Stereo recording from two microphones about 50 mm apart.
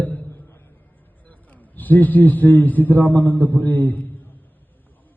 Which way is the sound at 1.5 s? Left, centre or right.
Left.